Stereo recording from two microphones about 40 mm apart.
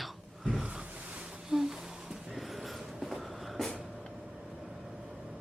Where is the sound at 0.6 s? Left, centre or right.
Right.